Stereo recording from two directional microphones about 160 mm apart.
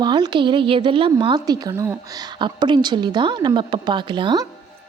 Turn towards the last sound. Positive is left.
turn(degrees=-30)  # may be behind; listen again after turning